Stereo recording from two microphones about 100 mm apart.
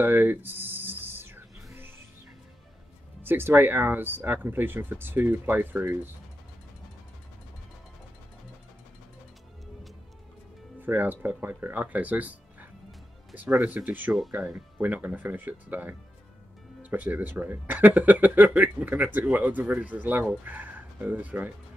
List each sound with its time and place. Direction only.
0.0 s a sound: 20° right (ahead or behind)
3.2 s speech: 20° right (ahead or behind)
10.8 s speech: 20° right (ahead or behind)